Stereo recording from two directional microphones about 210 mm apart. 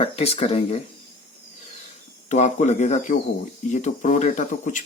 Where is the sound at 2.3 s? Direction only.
35° left (ahead or behind).